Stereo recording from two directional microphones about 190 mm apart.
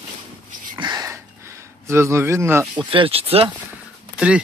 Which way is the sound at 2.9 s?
30° right (ahead or behind).